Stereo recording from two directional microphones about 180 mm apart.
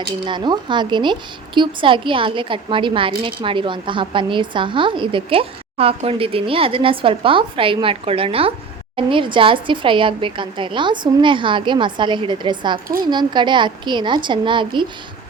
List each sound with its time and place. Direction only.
0.3 s a woman's voice: 25° right (ahead or behind)